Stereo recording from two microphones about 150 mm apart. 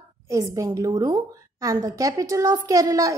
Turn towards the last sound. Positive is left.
turn(degrees=-20)  # may be behind; listen again after turning